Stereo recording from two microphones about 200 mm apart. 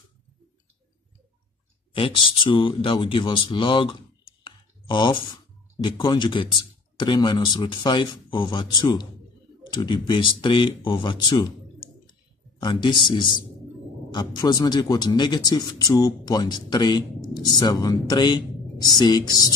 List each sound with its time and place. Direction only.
2.0 s speech: 25° left (ahead or behind)
12.1 s a sound: 20° left (ahead or behind)
14.1 s speech: 20° left (ahead or behind)